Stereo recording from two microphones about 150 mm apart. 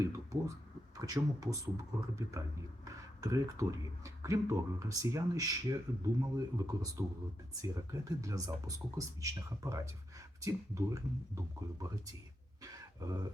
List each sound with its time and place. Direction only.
0.0 s speech: 20° right (ahead or behind)